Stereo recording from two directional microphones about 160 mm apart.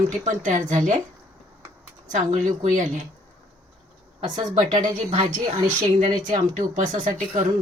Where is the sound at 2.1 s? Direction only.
50° right (ahead or behind).